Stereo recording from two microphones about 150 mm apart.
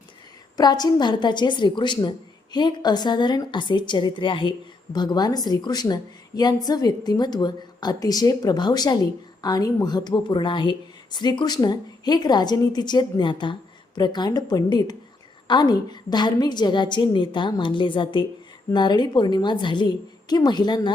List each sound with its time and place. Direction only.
0.5 s a woman's voice: 25° left (ahead or behind)